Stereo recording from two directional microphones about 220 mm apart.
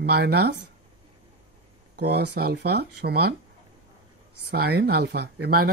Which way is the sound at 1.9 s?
50° right (ahead or behind).